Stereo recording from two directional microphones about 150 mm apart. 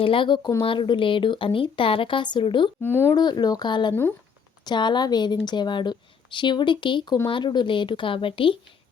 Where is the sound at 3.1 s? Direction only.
25° left (ahead or behind).